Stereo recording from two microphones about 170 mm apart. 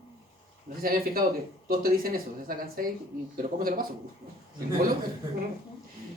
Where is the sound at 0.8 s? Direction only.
60° right (ahead or behind).